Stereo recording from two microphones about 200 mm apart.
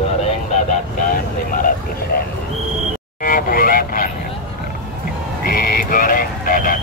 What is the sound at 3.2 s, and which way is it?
Vehicle, 45° left (ahead or behind).